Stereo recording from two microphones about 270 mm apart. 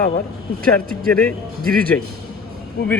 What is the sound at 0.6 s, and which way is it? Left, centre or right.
Speech, right.